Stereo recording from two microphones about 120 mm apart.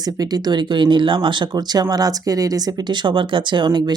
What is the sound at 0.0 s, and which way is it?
A man's voice, 35° right (ahead or behind).